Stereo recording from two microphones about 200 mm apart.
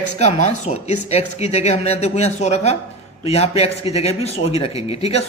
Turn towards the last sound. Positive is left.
turn(degrees=30)  # may be behind; listen again after turning